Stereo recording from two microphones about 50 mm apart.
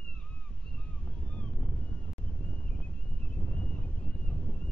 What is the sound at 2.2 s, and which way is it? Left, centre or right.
Wind, left.